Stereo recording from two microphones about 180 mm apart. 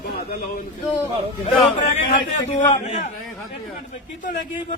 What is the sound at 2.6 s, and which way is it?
Speech, 40° left (ahead or behind).